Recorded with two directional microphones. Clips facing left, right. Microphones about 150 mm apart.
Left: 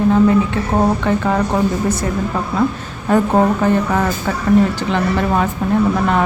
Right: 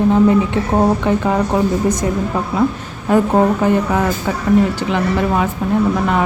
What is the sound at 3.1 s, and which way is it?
Speech, 10° right (ahead or behind).